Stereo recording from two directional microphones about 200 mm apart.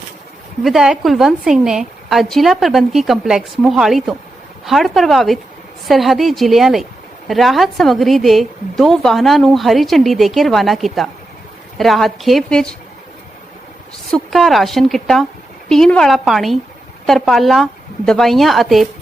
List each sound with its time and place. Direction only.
0.6 s a woman's voice: centre (ahead or behind)
14.1 s a woman's voice: centre (ahead or behind)